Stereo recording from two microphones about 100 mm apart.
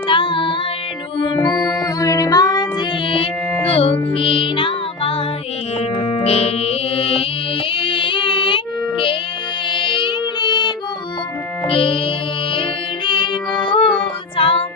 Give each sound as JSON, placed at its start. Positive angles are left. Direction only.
{"t": 0.1, "sound": "music", "side_deg": 55}
{"t": 1.6, "sound": "music", "side_deg": 35}
{"t": 3.7, "sound": "music", "side_deg": 70}
{"t": 11.7, "sound": "music", "side_deg": 65}
{"t": 13.1, "sound": "music", "side_deg": 55}
{"t": 14.0, "sound": "child singing", "side_deg": 65}